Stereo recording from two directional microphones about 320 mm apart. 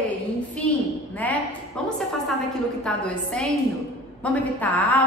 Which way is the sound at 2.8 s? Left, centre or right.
Centre.